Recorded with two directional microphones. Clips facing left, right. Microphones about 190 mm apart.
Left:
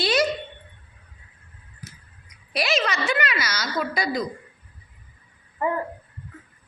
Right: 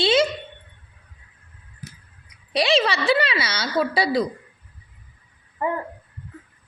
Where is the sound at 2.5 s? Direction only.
30° right (ahead or behind).